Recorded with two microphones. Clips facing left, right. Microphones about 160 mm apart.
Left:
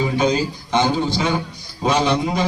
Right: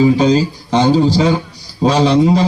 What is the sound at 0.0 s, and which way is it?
Speech, 30° right (ahead or behind).